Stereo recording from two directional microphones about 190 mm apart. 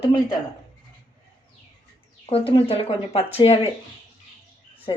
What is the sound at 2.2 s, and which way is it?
A woman's voice, 30° left (ahead or behind).